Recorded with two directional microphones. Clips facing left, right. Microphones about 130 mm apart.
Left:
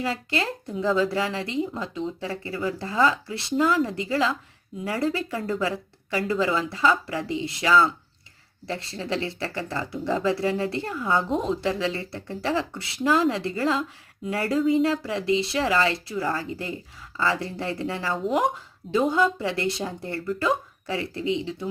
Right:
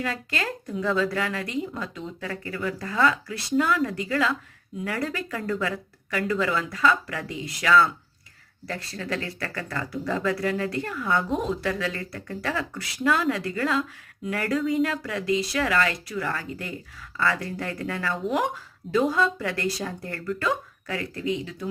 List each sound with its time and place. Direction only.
0.0 s speech: 25° left (ahead or behind)